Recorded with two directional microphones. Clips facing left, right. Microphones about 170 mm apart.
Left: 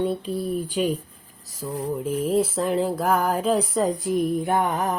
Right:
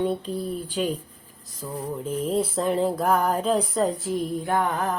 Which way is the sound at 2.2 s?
Centre (ahead or behind).